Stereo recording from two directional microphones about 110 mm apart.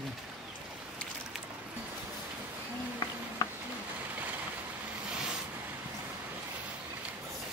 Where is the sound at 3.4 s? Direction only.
35° left (ahead or behind).